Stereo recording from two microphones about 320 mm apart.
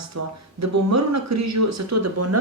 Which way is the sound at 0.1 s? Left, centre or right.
Right.